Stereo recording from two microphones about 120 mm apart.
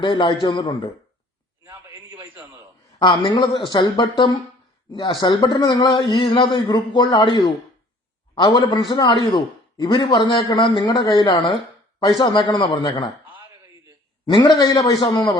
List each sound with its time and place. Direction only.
0.0 s speech: 40° left (ahead or behind)
1.6 s a sound: 25° right (ahead or behind)
3.0 s speech: 40° left (ahead or behind)
14.3 s speech: 40° left (ahead or behind)